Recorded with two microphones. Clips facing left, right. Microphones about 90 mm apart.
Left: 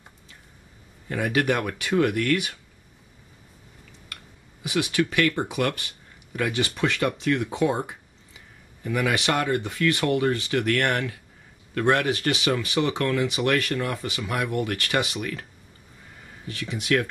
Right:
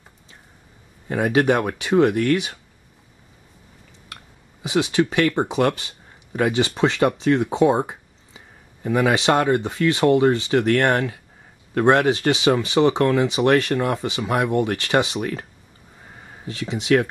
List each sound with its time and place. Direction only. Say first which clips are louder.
1.0 s speech: right 5 dB; 25° right (ahead or behind)
4.6 s speech: right 5 dB; 25° right (ahead or behind)
16.4 s speech: right 6 dB; 25° right (ahead or behind)